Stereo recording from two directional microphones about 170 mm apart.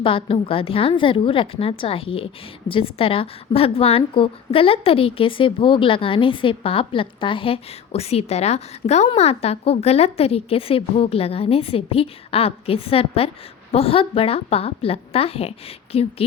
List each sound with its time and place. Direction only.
0.0 s a woman's voice: 30° left (ahead or behind)